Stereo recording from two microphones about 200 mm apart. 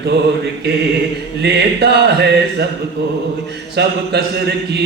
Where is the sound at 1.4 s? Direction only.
55° right (ahead or behind).